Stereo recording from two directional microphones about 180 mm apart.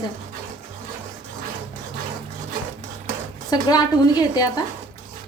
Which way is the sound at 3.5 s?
25° left (ahead or behind).